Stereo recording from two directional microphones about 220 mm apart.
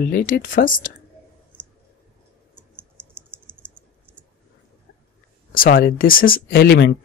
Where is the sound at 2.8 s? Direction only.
10° right (ahead or behind).